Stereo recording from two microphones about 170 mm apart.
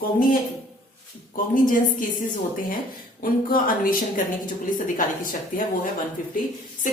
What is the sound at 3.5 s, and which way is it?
A woman's voice, 55° left (ahead or behind).